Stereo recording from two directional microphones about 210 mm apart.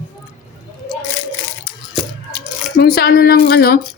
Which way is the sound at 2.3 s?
50° left (ahead or behind).